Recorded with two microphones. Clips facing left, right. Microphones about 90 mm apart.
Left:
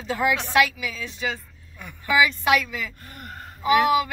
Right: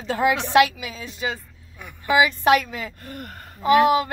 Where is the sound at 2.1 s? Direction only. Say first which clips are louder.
Right 3 dB; 35° right (ahead or behind).